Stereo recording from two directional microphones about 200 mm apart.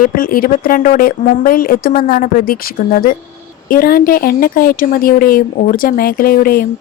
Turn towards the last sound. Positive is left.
turn(degrees=45)  # may be behind; listen again after turning